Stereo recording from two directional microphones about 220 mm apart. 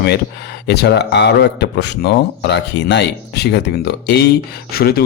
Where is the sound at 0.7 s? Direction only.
50° left (ahead or behind).